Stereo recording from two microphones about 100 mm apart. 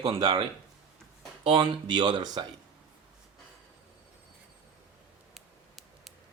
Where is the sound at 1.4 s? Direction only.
55° right (ahead or behind).